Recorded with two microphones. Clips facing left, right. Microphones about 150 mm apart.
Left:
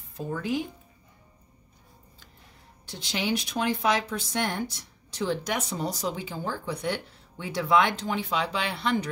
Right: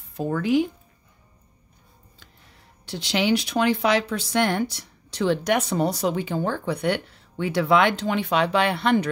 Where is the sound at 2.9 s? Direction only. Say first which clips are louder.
Right 7 dB; 80° right.